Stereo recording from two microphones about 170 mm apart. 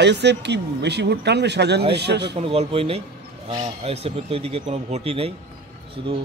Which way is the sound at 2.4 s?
35° right (ahead or behind).